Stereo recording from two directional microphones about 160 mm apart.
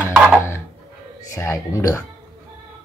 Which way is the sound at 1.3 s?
20° left (ahead or behind).